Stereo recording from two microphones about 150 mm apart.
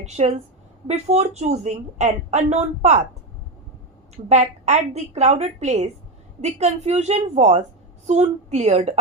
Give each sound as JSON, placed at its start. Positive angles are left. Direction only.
{"t": 0.0, "sound": "a woman's voice", "side_deg": -45}
{"t": 4.3, "sound": "a woman's voice", "side_deg": -50}